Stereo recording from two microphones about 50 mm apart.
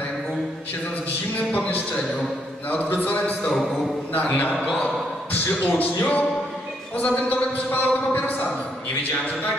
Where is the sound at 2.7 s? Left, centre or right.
Left.